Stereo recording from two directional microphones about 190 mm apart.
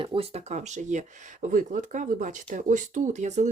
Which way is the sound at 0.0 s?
30° right (ahead or behind).